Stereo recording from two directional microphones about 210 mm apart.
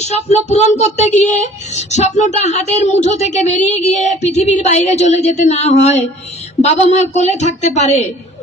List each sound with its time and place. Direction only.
0.0 s speech: 30° left (ahead or behind)